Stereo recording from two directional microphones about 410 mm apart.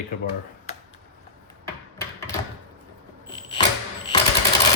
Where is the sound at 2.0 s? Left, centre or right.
Centre.